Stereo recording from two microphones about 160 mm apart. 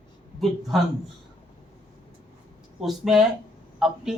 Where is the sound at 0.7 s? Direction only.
Centre (ahead or behind).